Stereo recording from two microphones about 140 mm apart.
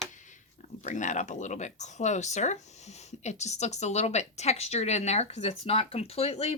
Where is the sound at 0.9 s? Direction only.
60° left (ahead or behind).